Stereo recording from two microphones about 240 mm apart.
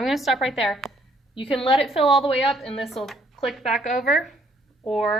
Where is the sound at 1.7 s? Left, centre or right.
Centre.